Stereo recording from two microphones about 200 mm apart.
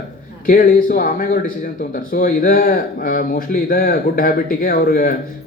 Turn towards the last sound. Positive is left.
turn(degrees=45)  # may be behind; listen again after turning